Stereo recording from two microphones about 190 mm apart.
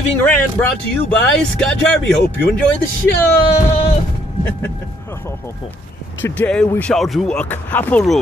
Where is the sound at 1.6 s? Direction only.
5° left (ahead or behind).